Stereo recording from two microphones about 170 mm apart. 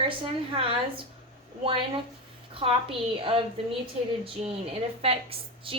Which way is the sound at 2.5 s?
30° right (ahead or behind).